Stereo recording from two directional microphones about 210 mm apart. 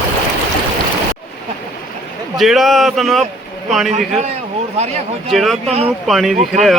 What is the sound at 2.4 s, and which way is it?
Speech, centre (ahead or behind).